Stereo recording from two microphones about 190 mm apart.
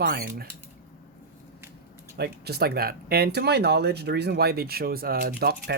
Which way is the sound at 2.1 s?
60° right (ahead or behind).